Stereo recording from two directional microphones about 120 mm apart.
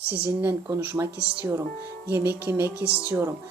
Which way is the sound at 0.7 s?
25° right (ahead or behind).